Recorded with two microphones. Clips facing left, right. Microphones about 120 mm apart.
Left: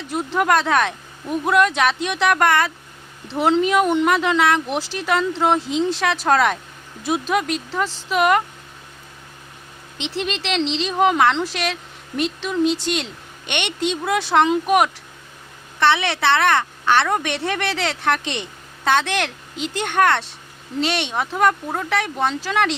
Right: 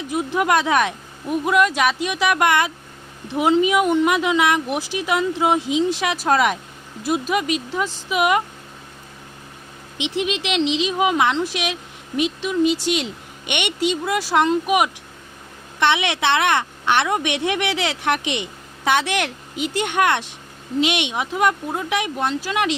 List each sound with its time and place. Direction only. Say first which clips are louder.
0.0 s speech: even; 10° right (ahead or behind)
10.0 s speech: right 2 dB; 10° right (ahead or behind)
15.8 s speech: left 1 dB; 15° right (ahead or behind)